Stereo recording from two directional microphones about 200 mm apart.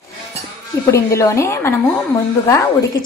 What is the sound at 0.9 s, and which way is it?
A woman's voice, 15° left (ahead or behind).